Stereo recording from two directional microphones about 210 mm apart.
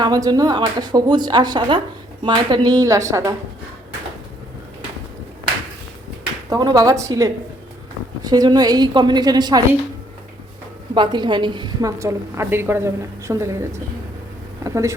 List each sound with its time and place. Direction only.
0.0 s a woman's voice: 20° right (ahead or behind)
6.5 s a woman's voice: 20° right (ahead or behind)
10.9 s a woman's voice: 20° right (ahead or behind)